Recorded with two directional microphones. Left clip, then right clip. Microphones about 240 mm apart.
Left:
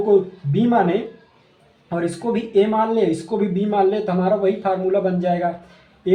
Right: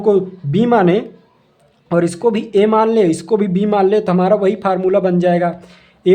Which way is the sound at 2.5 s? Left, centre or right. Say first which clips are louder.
Right 4 dB; right.